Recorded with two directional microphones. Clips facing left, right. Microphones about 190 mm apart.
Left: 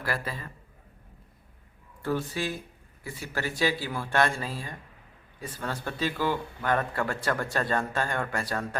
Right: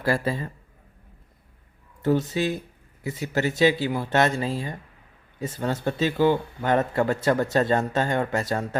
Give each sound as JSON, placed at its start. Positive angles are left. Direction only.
{"t": 0.0, "sound": "speech", "side_deg": -25}
{"t": 2.0, "sound": "speech", "side_deg": -20}